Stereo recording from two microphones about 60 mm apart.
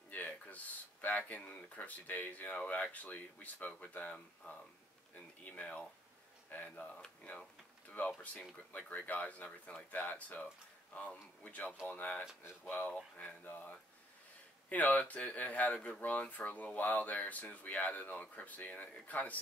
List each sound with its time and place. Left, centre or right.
0.1 s a sound: left
1.0 s speech: left
8.0 s speech: left